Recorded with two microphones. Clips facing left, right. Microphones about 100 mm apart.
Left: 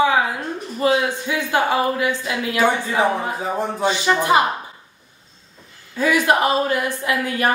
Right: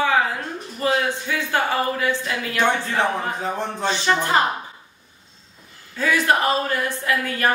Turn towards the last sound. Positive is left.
turn(degrees=15)  # may be behind; listen again after turning